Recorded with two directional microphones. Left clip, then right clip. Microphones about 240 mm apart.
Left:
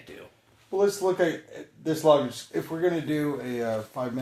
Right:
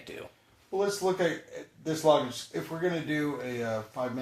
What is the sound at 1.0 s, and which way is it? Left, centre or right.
Speech, left.